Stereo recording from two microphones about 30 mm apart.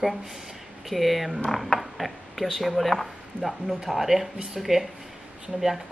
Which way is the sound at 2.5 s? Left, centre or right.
Centre.